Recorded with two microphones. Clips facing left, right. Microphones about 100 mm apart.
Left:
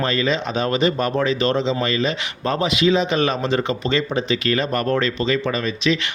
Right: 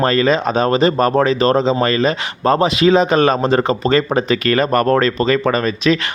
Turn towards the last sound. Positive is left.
turn(degrees=-45)  # may be behind; listen again after turning